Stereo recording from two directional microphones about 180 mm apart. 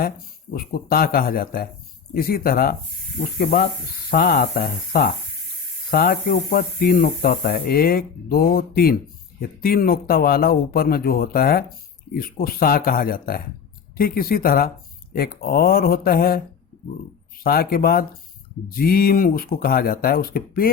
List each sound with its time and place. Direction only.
0.5 s speech: 55° left (ahead or behind)
17.4 s speech: 55° left (ahead or behind)